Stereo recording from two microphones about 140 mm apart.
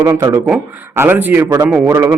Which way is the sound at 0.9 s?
15° right (ahead or behind).